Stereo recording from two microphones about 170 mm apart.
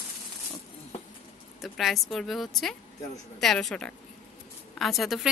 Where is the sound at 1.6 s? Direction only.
Centre (ahead or behind).